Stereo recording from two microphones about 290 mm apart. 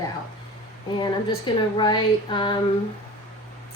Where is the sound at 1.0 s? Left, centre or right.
Centre.